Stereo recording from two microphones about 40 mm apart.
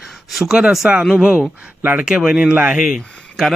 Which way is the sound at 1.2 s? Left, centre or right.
Right.